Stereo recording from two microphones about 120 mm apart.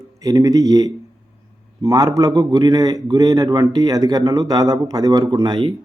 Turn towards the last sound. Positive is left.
turn(degrees=-40)  # may be behind; listen again after turning